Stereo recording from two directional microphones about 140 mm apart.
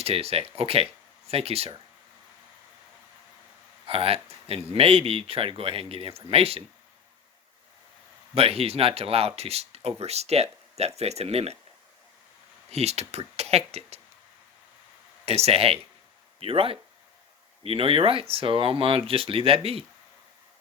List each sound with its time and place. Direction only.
0.0 s speech: 45° right (ahead or behind)
3.8 s speech: 45° right (ahead or behind)
8.4 s speech: 45° right (ahead or behind)
12.7 s speech: 50° right (ahead or behind)
15.2 s speech: 45° right (ahead or behind)